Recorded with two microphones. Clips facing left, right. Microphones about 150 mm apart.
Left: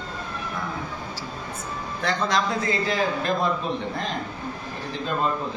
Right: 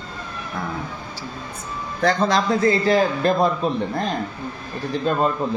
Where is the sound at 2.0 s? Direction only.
35° right (ahead or behind).